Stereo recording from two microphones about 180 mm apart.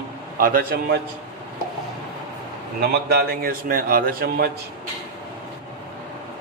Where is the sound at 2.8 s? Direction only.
60° right (ahead or behind).